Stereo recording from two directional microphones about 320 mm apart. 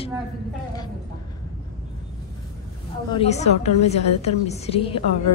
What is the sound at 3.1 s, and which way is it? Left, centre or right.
A woman's voice, centre.